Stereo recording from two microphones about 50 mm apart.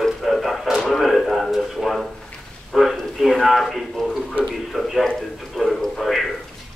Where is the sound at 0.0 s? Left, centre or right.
Centre.